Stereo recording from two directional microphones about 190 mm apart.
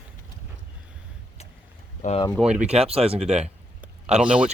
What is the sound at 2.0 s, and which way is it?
Speech, 35° left (ahead or behind).